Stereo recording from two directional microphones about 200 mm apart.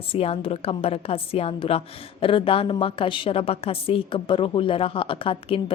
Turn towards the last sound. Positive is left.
turn(degrees=25)  # may be behind; listen again after turning